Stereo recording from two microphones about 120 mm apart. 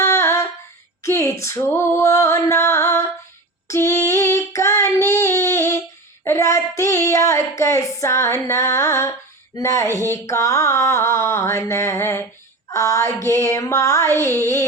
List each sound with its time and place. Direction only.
0.0 s a sound: 25° left (ahead or behind)
1.0 s mantra: 25° left (ahead or behind)
3.7 s child singing: 25° left (ahead or behind)
9.6 s mantra: 25° left (ahead or behind)